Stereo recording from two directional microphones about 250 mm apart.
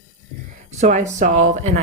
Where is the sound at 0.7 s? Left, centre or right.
Right.